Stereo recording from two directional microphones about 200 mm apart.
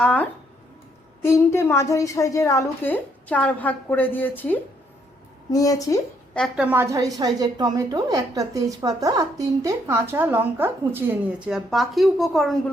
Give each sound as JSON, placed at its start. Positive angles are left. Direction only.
{"t": 0.0, "sound": "a woman's voice", "side_deg": 5}
{"t": 6.3, "sound": "a woman's voice", "side_deg": 5}
{"t": 6.7, "sound": "a woman's voice", "side_deg": -15}